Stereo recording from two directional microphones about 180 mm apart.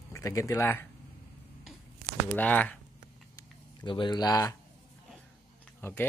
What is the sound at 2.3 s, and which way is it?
Speech, 10° left (ahead or behind).